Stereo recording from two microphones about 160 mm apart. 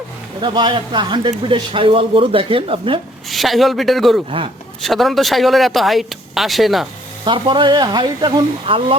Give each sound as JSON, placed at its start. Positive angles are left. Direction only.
{"t": 0.4, "sound": "a man's voice", "side_deg": -30}
{"t": 3.2, "sound": "speech", "side_deg": 0}
{"t": 7.3, "sound": "a man's voice", "side_deg": -30}